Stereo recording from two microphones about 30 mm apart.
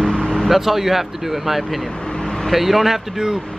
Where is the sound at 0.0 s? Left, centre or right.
Left.